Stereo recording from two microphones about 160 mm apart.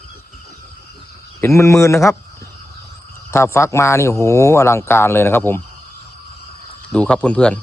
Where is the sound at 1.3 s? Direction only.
15° left (ahead or behind).